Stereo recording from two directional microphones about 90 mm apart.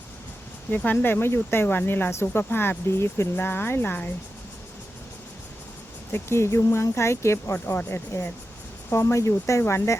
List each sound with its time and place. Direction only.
0.7 s speech: 20° left (ahead or behind)
6.1 s speech: 25° left (ahead or behind)
7.5 s speech: 20° left (ahead or behind)